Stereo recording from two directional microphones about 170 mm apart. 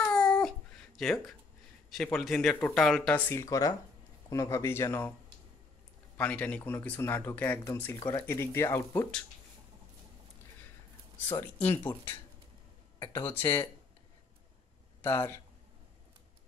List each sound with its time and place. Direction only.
0.0 s babbling: 10° left (ahead or behind)
1.9 s speech: 5° left (ahead or behind)
6.1 s speech: 10° left (ahead or behind)
11.2 s speech: 15° left (ahead or behind)
15.0 s speech: 15° left (ahead or behind)